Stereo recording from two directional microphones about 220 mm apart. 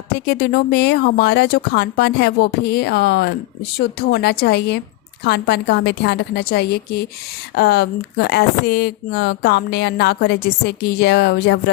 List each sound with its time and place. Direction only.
0.1 s speech: 45° left (ahead or behind)